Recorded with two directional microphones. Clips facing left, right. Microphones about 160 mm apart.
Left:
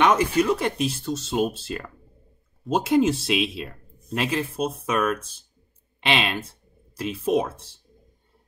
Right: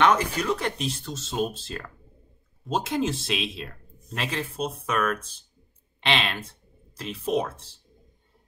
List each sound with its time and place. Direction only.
0.0 s speech: 10° left (ahead or behind)